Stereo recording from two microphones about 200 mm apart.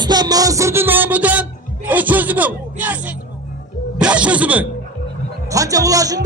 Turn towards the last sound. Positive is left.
turn(degrees=-15)  # may be behind; listen again after turning